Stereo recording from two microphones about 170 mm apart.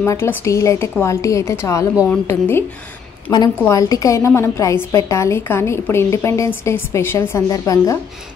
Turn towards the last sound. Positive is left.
turn(degrees=20)  # may be behind; listen again after turning